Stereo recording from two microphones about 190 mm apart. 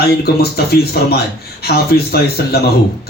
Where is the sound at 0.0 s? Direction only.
55° left (ahead or behind).